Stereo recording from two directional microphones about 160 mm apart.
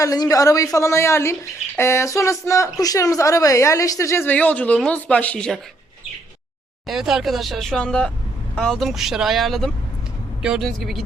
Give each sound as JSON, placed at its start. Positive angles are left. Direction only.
{"t": 0.0, "sound": "speech", "side_deg": 20}
{"t": 6.8, "sound": "speech", "side_deg": 0}